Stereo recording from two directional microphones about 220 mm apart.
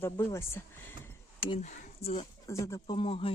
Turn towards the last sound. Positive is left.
turn(degrees=25)  # may be behind; listen again after turning